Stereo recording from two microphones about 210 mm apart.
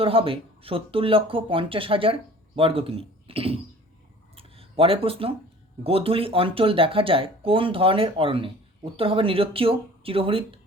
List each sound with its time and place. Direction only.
0.0 s speech: 25° right (ahead or behind)
4.4 s a sound: 25° right (ahead or behind)
5.8 s speech: 25° right (ahead or behind)